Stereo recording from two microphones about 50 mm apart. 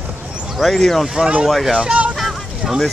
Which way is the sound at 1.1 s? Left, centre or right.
Centre.